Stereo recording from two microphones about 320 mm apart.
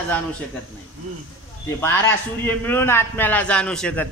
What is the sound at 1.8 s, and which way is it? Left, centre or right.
A man's voice, centre.